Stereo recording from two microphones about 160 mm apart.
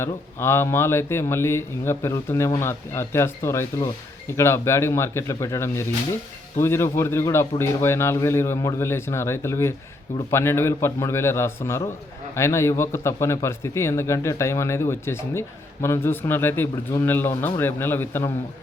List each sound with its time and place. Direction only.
0.0 s a man's voice: 15° left (ahead or behind)